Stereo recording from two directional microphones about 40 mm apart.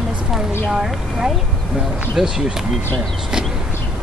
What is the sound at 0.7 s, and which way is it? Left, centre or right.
Speech, centre.